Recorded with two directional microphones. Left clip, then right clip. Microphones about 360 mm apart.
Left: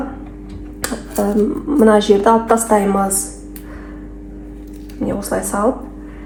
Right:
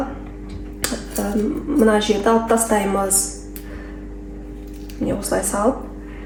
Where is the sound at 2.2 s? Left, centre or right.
Centre.